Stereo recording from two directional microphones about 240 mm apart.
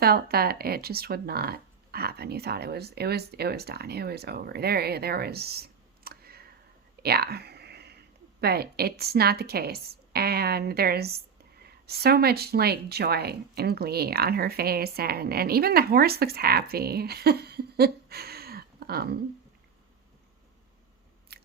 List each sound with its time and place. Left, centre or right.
0.0 s speech: right
21.3 s biting: right